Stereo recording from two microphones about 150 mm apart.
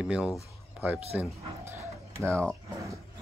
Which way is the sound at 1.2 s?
15° right (ahead or behind).